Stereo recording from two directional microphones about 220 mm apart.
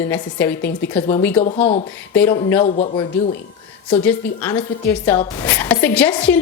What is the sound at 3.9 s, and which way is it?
Speech, 10° left (ahead or behind).